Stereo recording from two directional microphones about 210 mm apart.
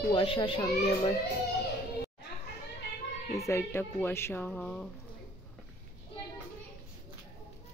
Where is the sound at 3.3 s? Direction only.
15° left (ahead or behind).